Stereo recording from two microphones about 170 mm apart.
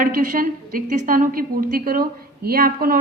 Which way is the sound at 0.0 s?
55° right (ahead or behind).